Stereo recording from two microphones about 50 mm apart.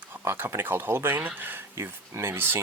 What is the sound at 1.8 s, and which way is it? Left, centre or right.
Speech, right.